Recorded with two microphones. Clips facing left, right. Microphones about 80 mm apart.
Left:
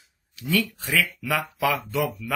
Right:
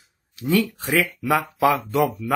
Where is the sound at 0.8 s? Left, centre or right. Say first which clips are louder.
Right 4 dB; right.